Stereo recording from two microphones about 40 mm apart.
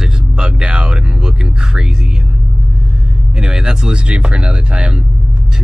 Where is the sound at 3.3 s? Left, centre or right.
Centre.